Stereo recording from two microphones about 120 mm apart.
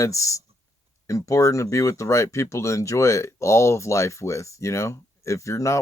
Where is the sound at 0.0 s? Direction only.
25° left (ahead or behind).